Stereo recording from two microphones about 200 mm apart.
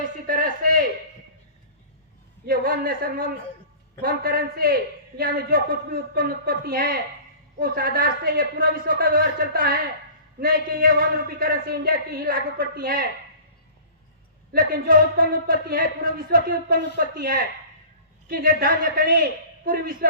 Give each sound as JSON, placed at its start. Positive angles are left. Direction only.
{"t": 0.3, "sound": "a sound", "side_deg": -45}
{"t": 2.5, "sound": "a man's voice", "side_deg": -45}
{"t": 14.5, "sound": "a man's voice", "side_deg": -45}